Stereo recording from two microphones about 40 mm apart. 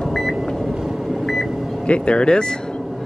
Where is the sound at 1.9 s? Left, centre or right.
Left.